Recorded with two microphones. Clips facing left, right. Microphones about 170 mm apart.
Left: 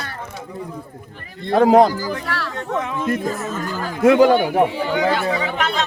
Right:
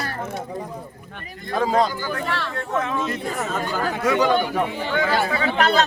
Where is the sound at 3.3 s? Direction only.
80° right.